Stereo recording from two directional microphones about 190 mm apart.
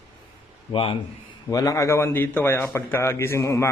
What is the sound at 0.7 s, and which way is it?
A man's voice, 25° left (ahead or behind).